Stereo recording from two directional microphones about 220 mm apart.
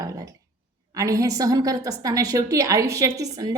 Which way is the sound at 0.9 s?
15° right (ahead or behind).